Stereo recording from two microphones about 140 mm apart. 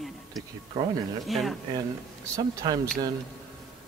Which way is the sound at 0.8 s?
25° right (ahead or behind).